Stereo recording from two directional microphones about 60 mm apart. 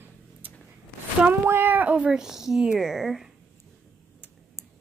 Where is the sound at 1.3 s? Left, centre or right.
Right.